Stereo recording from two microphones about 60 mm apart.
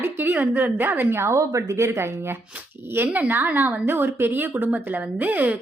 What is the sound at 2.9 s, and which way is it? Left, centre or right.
A woman's voice, right.